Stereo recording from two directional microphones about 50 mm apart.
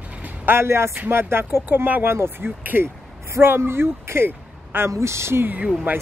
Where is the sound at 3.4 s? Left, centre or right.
Right.